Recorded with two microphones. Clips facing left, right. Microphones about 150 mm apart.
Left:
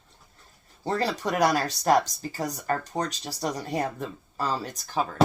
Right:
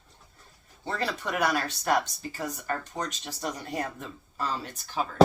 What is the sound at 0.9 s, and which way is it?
Speech, 35° left (ahead or behind).